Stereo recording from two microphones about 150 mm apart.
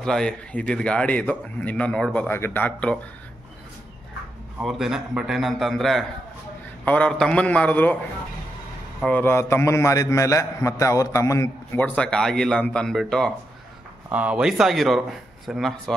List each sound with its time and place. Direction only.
0.0 s a man's voice: 5° left (ahead or behind)
4.6 s a man's voice: 5° right (ahead or behind)
9.0 s a man's voice: 15° left (ahead or behind)
14.0 s speech: 10° right (ahead or behind)